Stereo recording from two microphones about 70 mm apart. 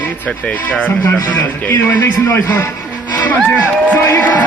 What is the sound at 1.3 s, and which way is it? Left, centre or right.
A man's voice, left.